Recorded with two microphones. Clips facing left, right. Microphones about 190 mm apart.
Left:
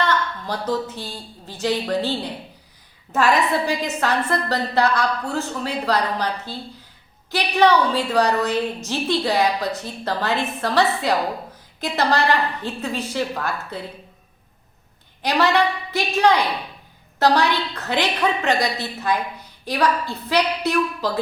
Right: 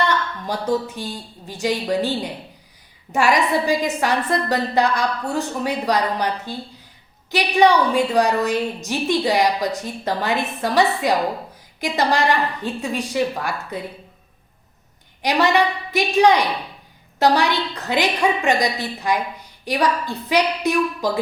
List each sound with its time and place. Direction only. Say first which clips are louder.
0.0 s a woman's voice: right 1 dB; 15° right (ahead or behind)
15.2 s a woman's voice: right 1 dB; 15° right (ahead or behind)